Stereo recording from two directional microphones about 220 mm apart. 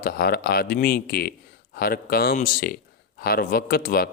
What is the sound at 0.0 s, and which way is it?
A man's voice, 40° left (ahead or behind).